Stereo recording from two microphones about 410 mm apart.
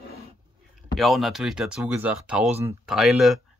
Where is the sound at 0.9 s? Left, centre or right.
Centre.